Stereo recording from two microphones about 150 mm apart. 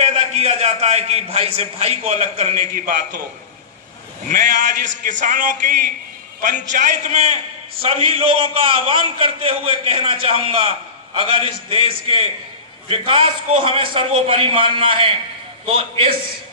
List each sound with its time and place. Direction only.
0.0 s a man's voice: 50° right (ahead or behind)
2.7 s a man's voice: 65° right (ahead or behind)
4.3 s a man's voice: 60° right (ahead or behind)
6.7 s a man's voice: 65° right (ahead or behind)
7.1 s a man's voice: 45° right (ahead or behind)